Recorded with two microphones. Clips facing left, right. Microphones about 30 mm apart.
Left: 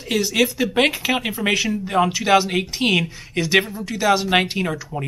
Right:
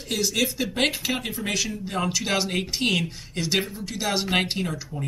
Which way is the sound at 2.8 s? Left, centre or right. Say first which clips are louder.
Left 5 dB; left.